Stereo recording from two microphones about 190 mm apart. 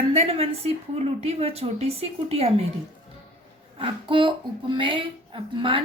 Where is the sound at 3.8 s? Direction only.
25° right (ahead or behind).